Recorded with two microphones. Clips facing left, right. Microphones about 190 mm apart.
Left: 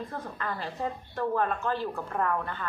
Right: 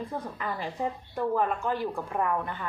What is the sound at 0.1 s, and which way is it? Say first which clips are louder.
A woman's voice: right 2 dB; 15° right (ahead or behind).